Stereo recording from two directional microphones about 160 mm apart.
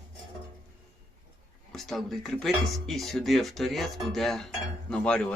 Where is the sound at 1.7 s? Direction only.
Centre (ahead or behind).